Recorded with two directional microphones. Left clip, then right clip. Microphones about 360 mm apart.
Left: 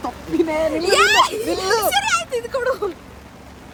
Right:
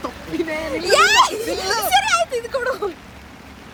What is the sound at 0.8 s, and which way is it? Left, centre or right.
Speech, centre.